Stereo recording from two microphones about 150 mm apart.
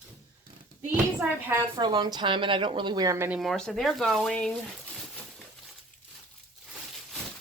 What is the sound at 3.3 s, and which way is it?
Speech, centre (ahead or behind).